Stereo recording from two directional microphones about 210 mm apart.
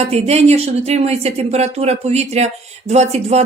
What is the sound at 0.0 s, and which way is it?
Speech, 30° right (ahead or behind).